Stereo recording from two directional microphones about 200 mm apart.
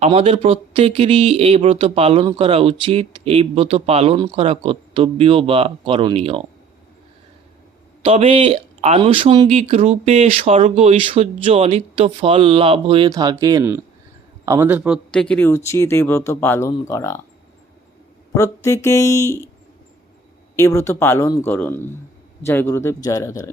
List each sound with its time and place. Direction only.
0.0 s speech: 30° right (ahead or behind)
8.0 s speech: 30° right (ahead or behind); by 17.2 s 15° left (ahead or behind)
18.3 s speech: 15° left (ahead or behind)
20.6 s speech: 15° left (ahead or behind)